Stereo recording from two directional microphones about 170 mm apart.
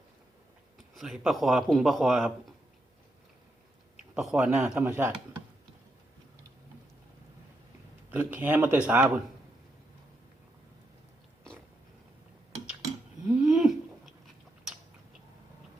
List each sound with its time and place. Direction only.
0.9 s a man's voice: centre (ahead or behind)
4.1 s a man's voice: 5° right (ahead or behind)
8.1 s speech: 10° right (ahead or behind)
13.2 s a sound: 5° right (ahead or behind)